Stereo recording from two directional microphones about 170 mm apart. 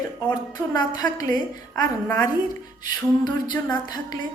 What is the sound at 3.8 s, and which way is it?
Speech, 25° left (ahead or behind).